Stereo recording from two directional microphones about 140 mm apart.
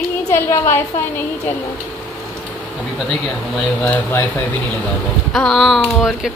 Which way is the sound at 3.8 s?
20° left (ahead or behind).